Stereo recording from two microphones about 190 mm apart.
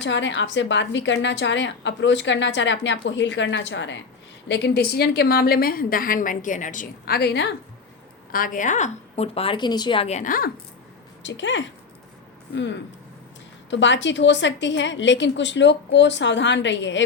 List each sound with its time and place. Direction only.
0.0 s a woman's voice: 70° left (ahead or behind)
8.3 s a woman's voice: 45° left (ahead or behind)
11.2 s a woman's voice: 70° left (ahead or behind)
13.7 s a woman's voice: 70° left (ahead or behind)